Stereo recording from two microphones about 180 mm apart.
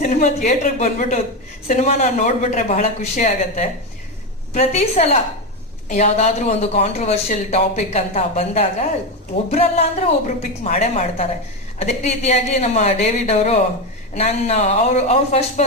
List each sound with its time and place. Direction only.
0.0 s speech: 40° left (ahead or behind)